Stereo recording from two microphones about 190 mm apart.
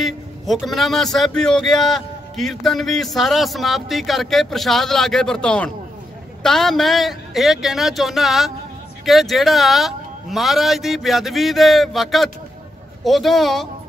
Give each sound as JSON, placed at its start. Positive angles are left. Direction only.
{"t": 0.0, "sound": "a man's voice", "side_deg": 0}